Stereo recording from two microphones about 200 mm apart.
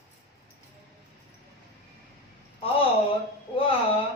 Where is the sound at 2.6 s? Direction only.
30° left (ahead or behind).